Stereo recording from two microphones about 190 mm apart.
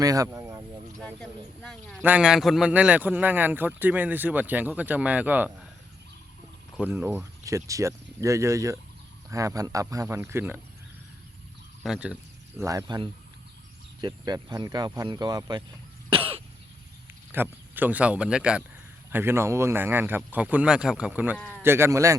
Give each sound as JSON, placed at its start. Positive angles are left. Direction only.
{"t": 0.0, "sound": "speech", "side_deg": -20}
{"t": 0.9, "sound": "a sound", "side_deg": 5}
{"t": 2.0, "sound": "speech", "side_deg": -10}
{"t": 6.7, "sound": "speech", "side_deg": -10}
{"t": 11.8, "sound": "speech", "side_deg": -5}
{"t": 12.5, "sound": "speech", "side_deg": -15}
{"t": 16.0, "sound": "cough", "side_deg": -30}
{"t": 17.3, "sound": "speech", "side_deg": -10}